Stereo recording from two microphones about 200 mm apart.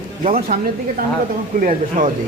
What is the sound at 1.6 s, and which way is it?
Speech, 40° right (ahead or behind).